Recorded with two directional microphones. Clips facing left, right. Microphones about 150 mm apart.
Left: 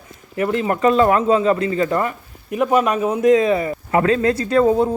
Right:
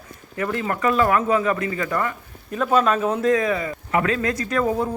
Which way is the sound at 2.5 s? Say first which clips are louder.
Left 2 dB; 15° left (ahead or behind).